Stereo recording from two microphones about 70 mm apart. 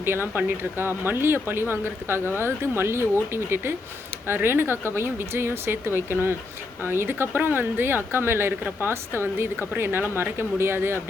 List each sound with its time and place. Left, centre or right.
0.0 s speech: right